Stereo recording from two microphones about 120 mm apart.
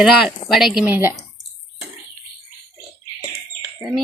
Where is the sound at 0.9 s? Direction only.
20° right (ahead or behind).